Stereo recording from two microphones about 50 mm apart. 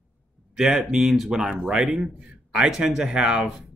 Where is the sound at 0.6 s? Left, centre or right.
Centre.